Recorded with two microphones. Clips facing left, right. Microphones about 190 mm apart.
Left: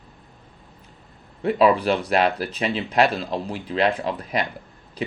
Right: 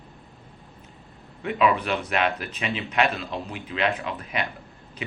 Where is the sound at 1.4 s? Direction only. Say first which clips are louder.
Left 5 dB; 35° left (ahead or behind).